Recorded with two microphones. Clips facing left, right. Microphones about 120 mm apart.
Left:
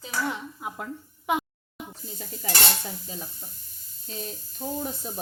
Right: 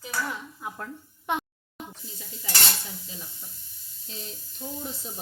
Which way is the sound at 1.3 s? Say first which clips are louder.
Left 3 dB; 5° left (ahead or behind).